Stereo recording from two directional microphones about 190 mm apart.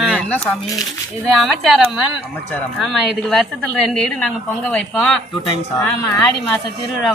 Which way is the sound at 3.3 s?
Centre (ahead or behind).